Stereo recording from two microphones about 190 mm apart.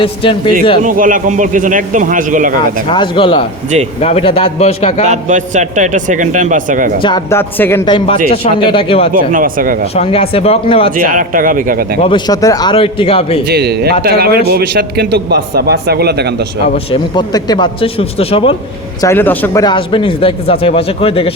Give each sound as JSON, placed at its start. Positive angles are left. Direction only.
{"t": 0.0, "sound": "speech", "side_deg": 25}
{"t": 0.8, "sound": "a man's voice", "side_deg": -45}
{"t": 2.9, "sound": "a man's voice", "side_deg": 25}
{"t": 5.1, "sound": "a man's voice", "side_deg": -40}
{"t": 7.3, "sound": "speech", "side_deg": 10}
{"t": 7.9, "sound": "speech", "side_deg": 25}
{"t": 9.1, "sound": "a man's voice", "side_deg": -45}
{"t": 9.9, "sound": "a man's voice", "side_deg": 30}
{"t": 10.9, "sound": "a man's voice", "side_deg": -45}
{"t": 12.0, "sound": "speech", "side_deg": 20}
{"t": 13.5, "sound": "a man's voice", "side_deg": -60}
{"t": 16.7, "sound": "speech", "side_deg": 25}
{"t": 19.0, "sound": "speech", "side_deg": 10}
{"t": 19.6, "sound": "speech", "side_deg": 25}